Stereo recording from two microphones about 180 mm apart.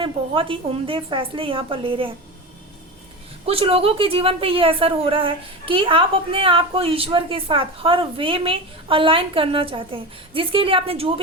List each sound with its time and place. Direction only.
0.0 s a woman's voice: 30° right (ahead or behind)
3.4 s a woman's voice: 30° right (ahead or behind)